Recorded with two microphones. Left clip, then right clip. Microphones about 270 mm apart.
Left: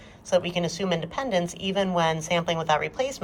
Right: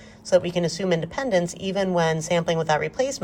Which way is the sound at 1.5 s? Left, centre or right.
Right.